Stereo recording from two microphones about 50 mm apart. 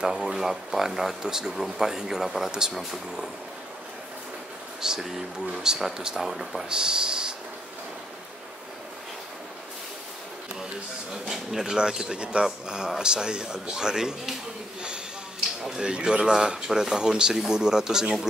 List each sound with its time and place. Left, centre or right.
0.0 s speech: centre
4.8 s speech: centre
6.7 s speech: centre
11.2 s speech: centre
15.8 s speech: centre